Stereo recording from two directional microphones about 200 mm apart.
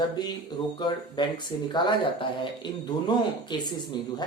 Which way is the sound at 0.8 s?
20° left (ahead or behind).